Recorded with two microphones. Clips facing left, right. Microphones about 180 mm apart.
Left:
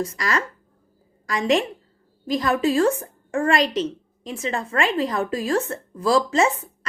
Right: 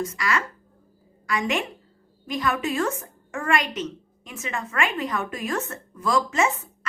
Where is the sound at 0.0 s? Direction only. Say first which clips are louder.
Left 2 dB; 35° left (ahead or behind).